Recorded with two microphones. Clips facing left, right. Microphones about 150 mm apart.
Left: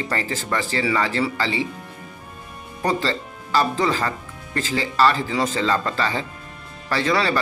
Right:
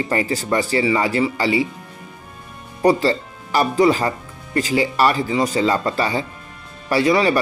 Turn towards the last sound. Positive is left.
turn(degrees=-15)  # may be behind; listen again after turning